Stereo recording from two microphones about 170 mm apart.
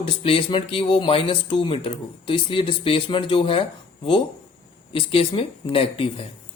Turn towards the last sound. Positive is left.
turn(degrees=35)  # may be behind; listen again after turning